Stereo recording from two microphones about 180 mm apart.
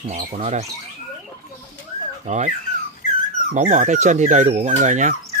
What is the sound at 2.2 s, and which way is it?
Speech, 40° right (ahead or behind).